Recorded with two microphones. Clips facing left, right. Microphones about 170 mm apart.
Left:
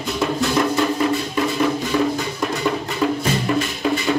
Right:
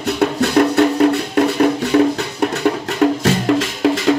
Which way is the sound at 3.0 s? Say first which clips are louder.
Right 6 dB; 80° right.